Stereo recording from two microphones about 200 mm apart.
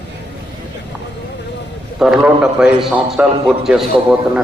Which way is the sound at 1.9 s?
5° right (ahead or behind).